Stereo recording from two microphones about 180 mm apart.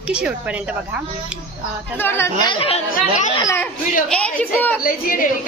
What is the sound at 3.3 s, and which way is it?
Speech, 15° left (ahead or behind).